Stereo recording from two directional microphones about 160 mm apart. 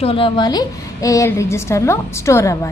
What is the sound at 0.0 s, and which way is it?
A woman's voice, 35° left (ahead or behind).